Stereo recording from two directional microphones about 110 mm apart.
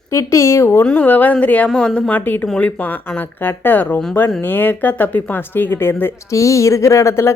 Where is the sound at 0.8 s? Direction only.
15° left (ahead or behind).